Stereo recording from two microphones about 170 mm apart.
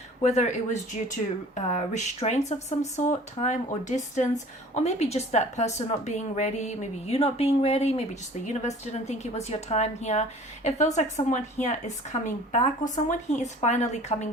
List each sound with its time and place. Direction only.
0.2 s a woman's voice: 40° left (ahead or behind)